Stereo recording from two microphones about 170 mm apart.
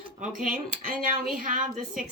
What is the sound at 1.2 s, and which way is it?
Speech, 55° right (ahead or behind).